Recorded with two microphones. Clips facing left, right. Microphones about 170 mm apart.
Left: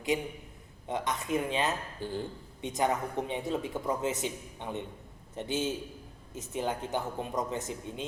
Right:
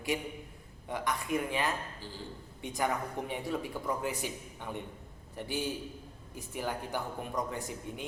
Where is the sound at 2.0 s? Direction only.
55° left (ahead or behind).